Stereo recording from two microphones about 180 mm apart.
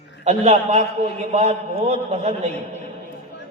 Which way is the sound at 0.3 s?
40° right (ahead or behind).